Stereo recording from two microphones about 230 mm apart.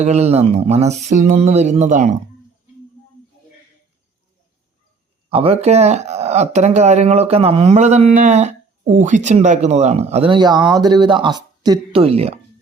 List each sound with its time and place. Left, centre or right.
0.0 s speech: right
5.3 s speech: right